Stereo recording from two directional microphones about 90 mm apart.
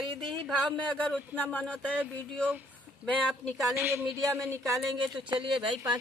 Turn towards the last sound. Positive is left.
turn(degrees=-65)  # may be behind; listen again after turning